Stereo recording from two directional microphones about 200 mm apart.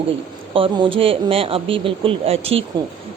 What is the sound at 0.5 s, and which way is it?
Speech, 25° right (ahead or behind).